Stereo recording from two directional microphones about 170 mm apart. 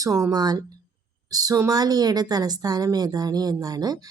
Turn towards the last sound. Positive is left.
turn(degrees=-20)  # may be behind; listen again after turning